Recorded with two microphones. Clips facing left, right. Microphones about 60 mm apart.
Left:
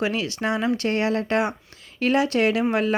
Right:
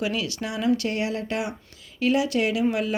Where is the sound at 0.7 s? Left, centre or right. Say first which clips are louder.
Left 4 dB; left.